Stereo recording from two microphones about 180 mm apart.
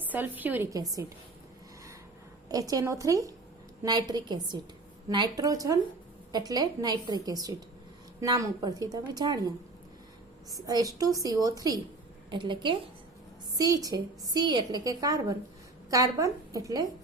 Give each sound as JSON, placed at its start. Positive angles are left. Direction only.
{"t": 0.0, "sound": "a woman's voice", "side_deg": -10}
{"t": 2.5, "sound": "a woman's voice", "side_deg": -20}
{"t": 10.5, "sound": "a woman's voice", "side_deg": -20}